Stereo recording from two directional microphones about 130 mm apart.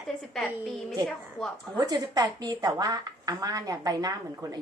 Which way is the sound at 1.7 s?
30° right (ahead or behind).